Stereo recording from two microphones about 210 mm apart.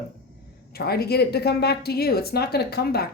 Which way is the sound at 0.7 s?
50° left (ahead or behind).